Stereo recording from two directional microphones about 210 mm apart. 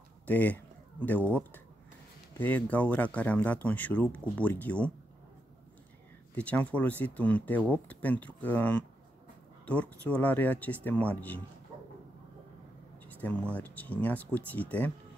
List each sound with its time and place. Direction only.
0.3 s speech: 10° left (ahead or behind)
6.3 s speech: 5° left (ahead or behind)
10.0 s speech: 10° left (ahead or behind)
11.7 s a sound: 20° right (ahead or behind)
13.0 s a sound: 10° left (ahead or behind)
13.6 s speech: 10° left (ahead or behind)